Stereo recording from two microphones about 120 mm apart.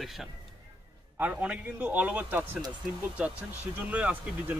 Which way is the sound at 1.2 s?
10° right (ahead or behind).